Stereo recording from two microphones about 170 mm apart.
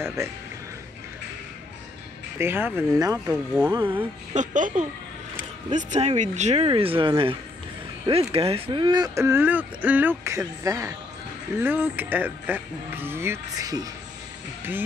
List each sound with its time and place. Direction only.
0.0 s speech: 15° right (ahead or behind)
2.3 s speech: 15° right (ahead or behind)
3.3 s speech: 5° right (ahead or behind)
4.3 s speech: 45° right (ahead or behind); by 13.8 s 20° right (ahead or behind)